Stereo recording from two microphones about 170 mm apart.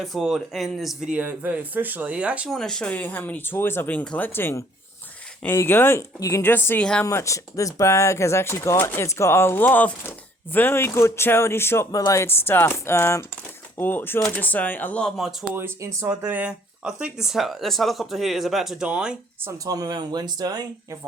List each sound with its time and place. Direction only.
0.0 s speech: centre (ahead or behind)
15.5 s speech: 15° right (ahead or behind)
19.6 s speech: 20° right (ahead or behind)